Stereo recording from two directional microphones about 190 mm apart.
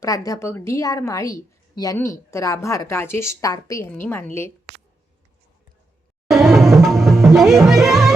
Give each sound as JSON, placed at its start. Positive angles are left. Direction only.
{"t": 0.0, "sound": "a woman's voice", "side_deg": 20}
{"t": 6.2, "sound": "music", "side_deg": 0}